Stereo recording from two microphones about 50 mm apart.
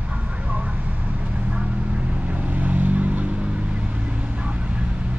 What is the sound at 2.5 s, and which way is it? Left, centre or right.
Vehicle, right.